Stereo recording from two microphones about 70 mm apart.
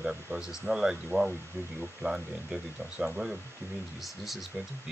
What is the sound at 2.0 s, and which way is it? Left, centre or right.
Speech, centre.